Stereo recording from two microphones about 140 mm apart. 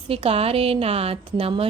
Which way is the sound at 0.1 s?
45° right (ahead or behind).